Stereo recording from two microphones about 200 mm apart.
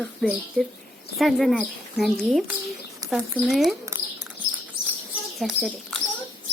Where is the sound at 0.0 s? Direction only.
Centre (ahead or behind).